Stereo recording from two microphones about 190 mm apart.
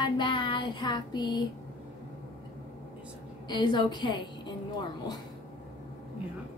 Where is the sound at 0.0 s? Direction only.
25° left (ahead or behind).